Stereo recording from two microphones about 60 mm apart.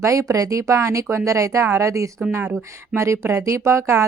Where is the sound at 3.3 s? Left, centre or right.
Right.